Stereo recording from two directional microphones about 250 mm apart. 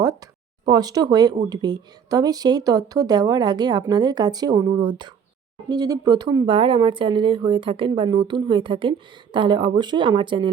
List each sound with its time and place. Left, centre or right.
0.0 s speech: centre